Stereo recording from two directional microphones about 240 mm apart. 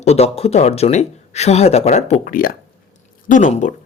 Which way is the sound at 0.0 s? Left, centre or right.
Left.